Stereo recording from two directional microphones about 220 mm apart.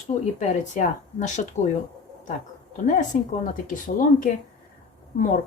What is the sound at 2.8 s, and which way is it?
Speech, 35° left (ahead or behind).